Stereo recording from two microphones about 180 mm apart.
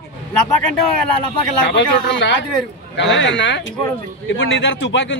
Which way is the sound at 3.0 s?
90° left.